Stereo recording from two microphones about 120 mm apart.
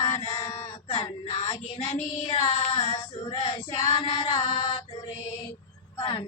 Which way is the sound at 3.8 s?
70° left (ahead or behind).